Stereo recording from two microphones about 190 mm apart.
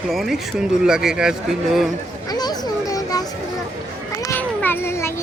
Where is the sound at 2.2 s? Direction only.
20° left (ahead or behind).